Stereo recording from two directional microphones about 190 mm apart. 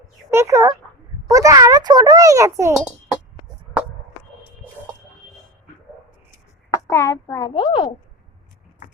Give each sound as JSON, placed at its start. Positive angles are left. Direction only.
{"t": 0.3, "sound": "a child's voice", "side_deg": -15}
{"t": 6.9, "sound": "a child's voice", "side_deg": 15}